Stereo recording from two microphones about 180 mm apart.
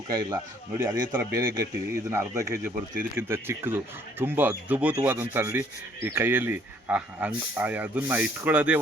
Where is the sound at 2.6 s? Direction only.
50° right (ahead or behind).